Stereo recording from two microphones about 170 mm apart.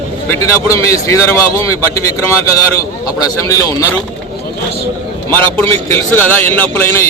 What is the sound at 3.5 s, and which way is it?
Speech, 20° left (ahead or behind).